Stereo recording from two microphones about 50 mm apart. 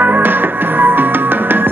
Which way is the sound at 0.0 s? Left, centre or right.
Right.